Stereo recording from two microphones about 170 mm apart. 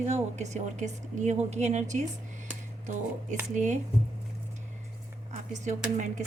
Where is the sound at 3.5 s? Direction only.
45° right (ahead or behind).